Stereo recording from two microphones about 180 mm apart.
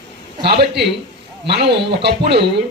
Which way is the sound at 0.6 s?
70° right (ahead or behind).